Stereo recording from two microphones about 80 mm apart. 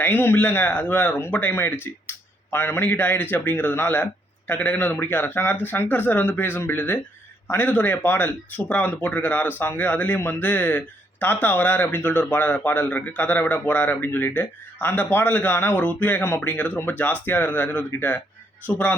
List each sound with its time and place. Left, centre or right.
0.0 s speech: left